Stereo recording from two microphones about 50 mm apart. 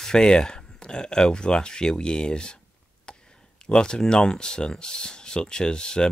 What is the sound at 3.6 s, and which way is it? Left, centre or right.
Speech, centre.